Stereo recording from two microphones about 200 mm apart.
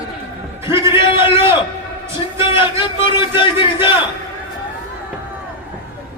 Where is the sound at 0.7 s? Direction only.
15° right (ahead or behind).